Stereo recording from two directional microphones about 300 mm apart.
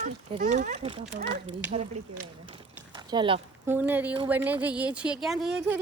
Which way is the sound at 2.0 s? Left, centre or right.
Right.